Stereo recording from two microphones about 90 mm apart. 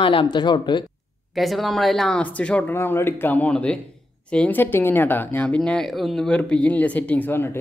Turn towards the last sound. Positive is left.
turn(degrees=25)  # may be behind; listen again after turning